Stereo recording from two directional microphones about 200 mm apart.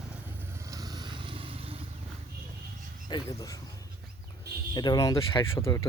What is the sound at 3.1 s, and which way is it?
Speech, 20° left (ahead or behind).